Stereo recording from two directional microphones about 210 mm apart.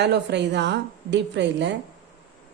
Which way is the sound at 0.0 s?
55° right (ahead or behind).